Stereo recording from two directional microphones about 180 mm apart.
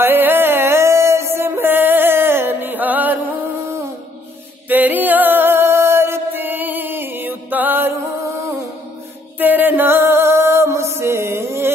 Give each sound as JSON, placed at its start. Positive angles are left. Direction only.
{"t": 0.0, "sound": "music", "side_deg": -10}
{"t": 4.6, "sound": "music", "side_deg": -10}
{"t": 9.4, "sound": "music", "side_deg": -10}